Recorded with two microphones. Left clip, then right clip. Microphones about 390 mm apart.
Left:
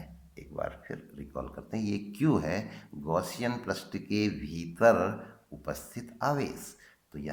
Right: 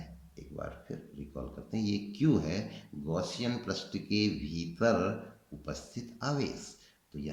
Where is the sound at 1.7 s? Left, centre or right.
Centre.